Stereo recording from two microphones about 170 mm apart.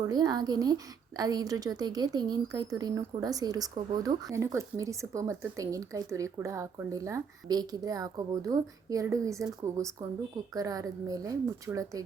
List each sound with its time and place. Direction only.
0.1 s a woman's voice: 25° right (ahead or behind)